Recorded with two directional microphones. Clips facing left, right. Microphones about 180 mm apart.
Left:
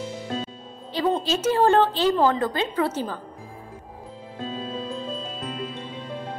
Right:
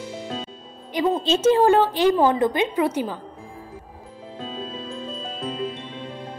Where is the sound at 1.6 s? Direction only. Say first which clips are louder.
Right 2 dB; 10° right (ahead or behind).